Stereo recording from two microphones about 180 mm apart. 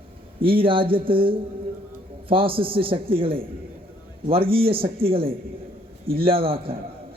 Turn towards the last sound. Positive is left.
turn(degrees=-30)  # may be behind; listen again after turning